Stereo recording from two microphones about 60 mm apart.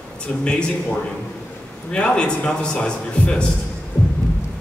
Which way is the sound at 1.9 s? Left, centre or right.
Centre.